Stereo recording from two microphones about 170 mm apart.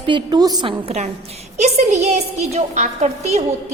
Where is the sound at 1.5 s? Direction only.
45° right (ahead or behind).